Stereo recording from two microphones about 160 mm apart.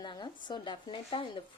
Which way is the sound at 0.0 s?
30° left (ahead or behind).